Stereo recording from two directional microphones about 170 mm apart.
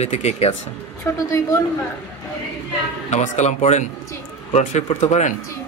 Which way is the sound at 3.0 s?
40° left (ahead or behind).